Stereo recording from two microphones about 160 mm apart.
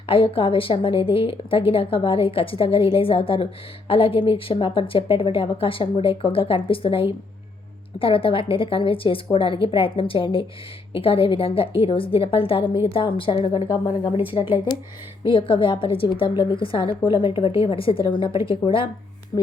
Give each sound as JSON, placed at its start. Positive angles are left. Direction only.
{"t": 0.1, "sound": "a woman's voice", "side_deg": 35}
{"t": 15.3, "sound": "a woman's voice", "side_deg": 30}